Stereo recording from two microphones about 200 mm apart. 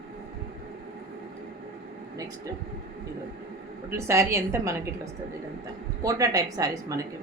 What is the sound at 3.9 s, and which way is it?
Speech, 15° right (ahead or behind).